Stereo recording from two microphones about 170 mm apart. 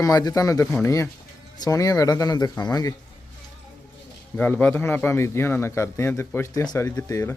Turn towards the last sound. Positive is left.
turn(degrees=15)  # may be behind; listen again after turning